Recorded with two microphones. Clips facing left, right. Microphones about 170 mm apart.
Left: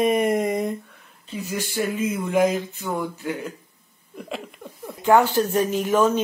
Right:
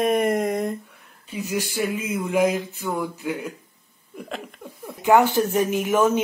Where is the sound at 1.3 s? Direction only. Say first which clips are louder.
Right 2 dB; 10° right (ahead or behind).